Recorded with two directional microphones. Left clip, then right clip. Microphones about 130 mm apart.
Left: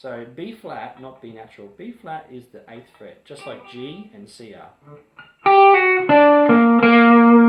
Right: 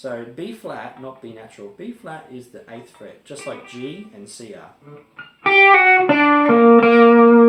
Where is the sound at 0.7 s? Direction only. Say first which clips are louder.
Right 1 dB; 30° left (ahead or behind).